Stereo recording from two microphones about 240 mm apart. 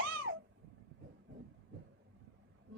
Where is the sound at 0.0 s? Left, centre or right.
Right.